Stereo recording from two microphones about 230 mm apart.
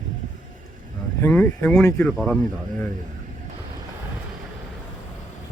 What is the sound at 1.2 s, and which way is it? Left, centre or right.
Speech, centre.